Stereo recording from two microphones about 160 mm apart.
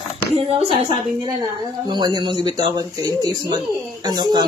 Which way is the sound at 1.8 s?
30° right (ahead or behind).